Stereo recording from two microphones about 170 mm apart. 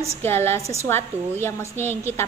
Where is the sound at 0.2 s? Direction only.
15° left (ahead or behind).